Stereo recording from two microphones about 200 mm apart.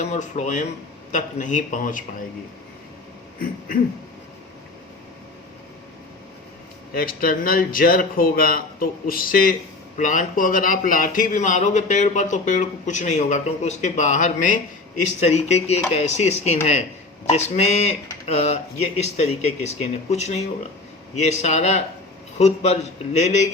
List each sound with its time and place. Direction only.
0.0 s a man's voice: 35° left (ahead or behind)
6.9 s a man's voice: 45° left (ahead or behind)